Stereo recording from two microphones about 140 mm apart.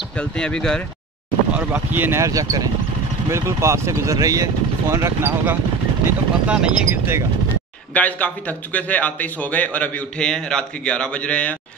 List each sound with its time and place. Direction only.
0.2 s a man's voice: 5° left (ahead or behind)
1.5 s speech: 10° right (ahead or behind)
7.9 s a man's voice: 10° left (ahead or behind)